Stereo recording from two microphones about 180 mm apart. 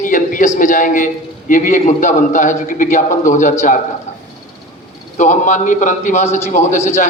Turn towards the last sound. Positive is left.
turn(degrees=40)  # may be behind; listen again after turning